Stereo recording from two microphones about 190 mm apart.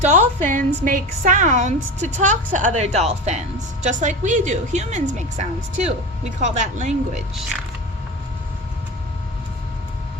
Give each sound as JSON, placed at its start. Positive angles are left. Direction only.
{"t": 0.0, "sound": "a woman's voice", "side_deg": -40}